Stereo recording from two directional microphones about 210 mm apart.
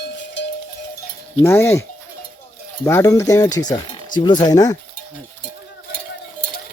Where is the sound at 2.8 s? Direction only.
15° left (ahead or behind).